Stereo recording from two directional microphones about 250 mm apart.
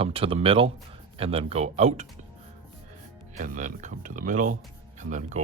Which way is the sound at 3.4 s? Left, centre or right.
Right.